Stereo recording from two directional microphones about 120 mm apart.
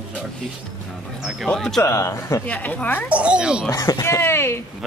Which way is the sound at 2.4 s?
15° left (ahead or behind).